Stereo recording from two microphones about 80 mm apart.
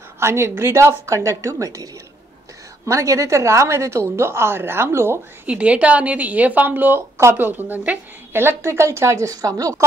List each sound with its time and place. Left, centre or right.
0.2 s a woman's voice: right
2.9 s a woman's voice: right
5.5 s a woman's voice: centre
8.3 s a woman's voice: right